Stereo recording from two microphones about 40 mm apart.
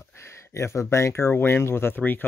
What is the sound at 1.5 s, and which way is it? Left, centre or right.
Speech, left.